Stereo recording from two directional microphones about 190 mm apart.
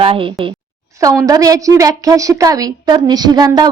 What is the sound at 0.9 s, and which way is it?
A woman's voice, 15° right (ahead or behind).